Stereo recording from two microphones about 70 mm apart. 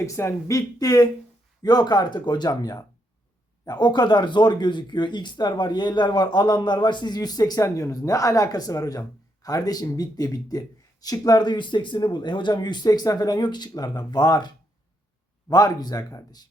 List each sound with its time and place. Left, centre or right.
0.0 s speech: left
0.5 s speech: left
1.6 s speech: left
3.7 s speech: left